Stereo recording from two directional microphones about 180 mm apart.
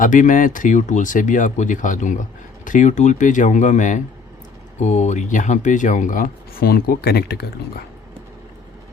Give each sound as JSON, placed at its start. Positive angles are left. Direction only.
{"t": 0.0, "sound": "speech", "side_deg": 45}